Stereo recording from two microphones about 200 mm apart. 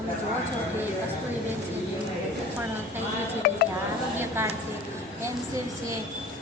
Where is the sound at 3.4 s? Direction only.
45° left (ahead or behind).